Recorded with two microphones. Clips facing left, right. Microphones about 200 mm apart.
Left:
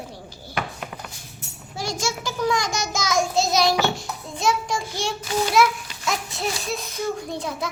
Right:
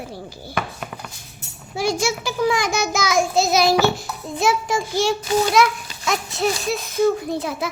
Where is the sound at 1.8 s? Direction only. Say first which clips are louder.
Right 6 dB; 10° right (ahead or behind).